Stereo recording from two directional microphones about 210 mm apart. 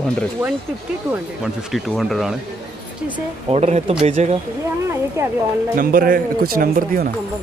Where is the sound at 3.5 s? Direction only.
30° right (ahead or behind).